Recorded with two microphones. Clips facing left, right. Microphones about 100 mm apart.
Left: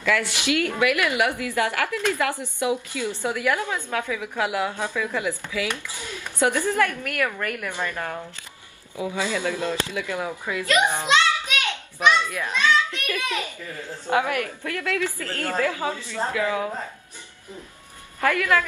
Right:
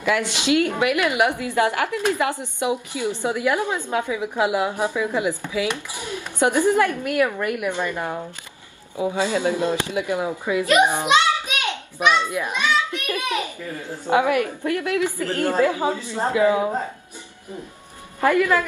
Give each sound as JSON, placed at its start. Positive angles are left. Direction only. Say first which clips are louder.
{"t": 0.0, "sound": "a woman's voice", "louder": "right 2 dB", "side_deg": -20}
{"t": 18.2, "sound": "a woman's voice", "louder": "right 3 dB", "side_deg": -15}